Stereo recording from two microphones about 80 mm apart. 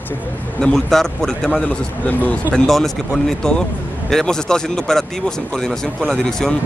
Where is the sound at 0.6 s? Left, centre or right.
Centre.